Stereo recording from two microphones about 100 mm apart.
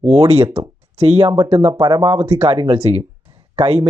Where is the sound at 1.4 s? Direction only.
80° right.